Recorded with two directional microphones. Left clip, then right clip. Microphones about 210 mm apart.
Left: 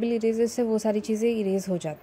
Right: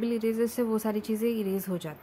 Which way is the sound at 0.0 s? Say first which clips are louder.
Left 4 dB; 5° left (ahead or behind).